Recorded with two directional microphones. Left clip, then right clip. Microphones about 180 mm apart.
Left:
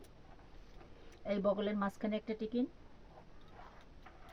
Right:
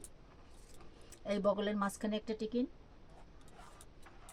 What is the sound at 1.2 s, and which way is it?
Speech, 20° right (ahead or behind).